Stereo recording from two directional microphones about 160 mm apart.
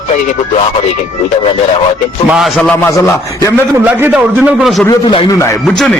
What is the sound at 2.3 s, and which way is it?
A man's voice, centre (ahead or behind).